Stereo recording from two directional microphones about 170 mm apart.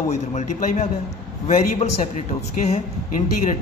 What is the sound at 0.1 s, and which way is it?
A man's voice, 40° left (ahead or behind).